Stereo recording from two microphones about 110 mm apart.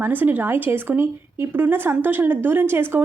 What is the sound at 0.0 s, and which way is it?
A woman's voice, 20° right (ahead or behind).